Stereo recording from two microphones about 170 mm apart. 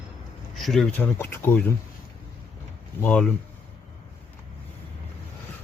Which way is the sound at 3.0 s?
10° left (ahead or behind).